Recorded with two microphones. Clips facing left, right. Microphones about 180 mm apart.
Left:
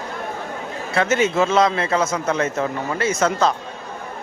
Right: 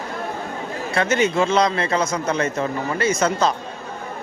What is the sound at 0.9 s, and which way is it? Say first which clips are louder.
A man's voice: left 1 dB; centre (ahead or behind).